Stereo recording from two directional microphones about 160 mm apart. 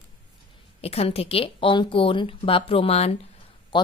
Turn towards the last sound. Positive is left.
turn(degrees=30)  # may be behind; listen again after turning